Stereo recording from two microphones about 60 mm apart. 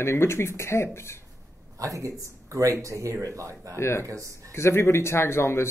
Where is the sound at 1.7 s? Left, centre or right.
Right.